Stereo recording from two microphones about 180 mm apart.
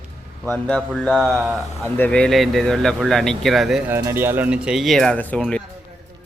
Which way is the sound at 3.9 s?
15° right (ahead or behind).